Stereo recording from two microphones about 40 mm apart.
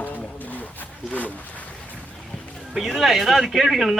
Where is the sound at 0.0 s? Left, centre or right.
Left.